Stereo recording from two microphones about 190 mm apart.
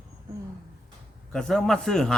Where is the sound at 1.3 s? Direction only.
Centre (ahead or behind).